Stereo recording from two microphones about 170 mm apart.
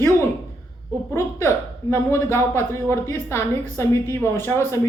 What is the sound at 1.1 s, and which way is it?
A woman's voice, 15° left (ahead or behind).